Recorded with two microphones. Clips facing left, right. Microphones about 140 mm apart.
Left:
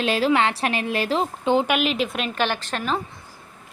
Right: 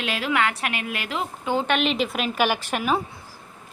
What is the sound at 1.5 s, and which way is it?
A woman's voice, 10° left (ahead or behind).